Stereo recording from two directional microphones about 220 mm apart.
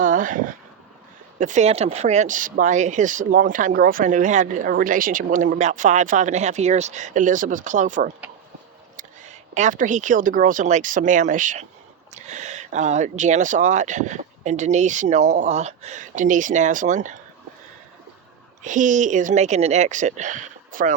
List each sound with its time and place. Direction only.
0.0 s a sound: 35° right (ahead or behind)
1.4 s speech: 35° right (ahead or behind)
18.6 s speech: 35° right (ahead or behind)